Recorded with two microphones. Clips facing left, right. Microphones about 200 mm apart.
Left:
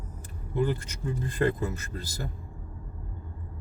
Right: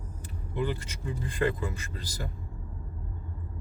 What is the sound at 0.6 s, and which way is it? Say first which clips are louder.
Speech: left 3 dB; 45° left (ahead or behind).